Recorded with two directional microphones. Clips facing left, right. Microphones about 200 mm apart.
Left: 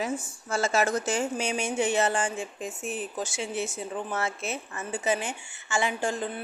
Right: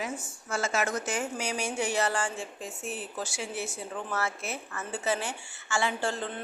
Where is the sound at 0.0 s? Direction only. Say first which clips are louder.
Left 5 dB; 35° left (ahead or behind).